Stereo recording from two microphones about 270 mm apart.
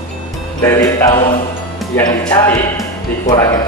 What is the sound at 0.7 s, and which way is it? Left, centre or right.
Speech, centre.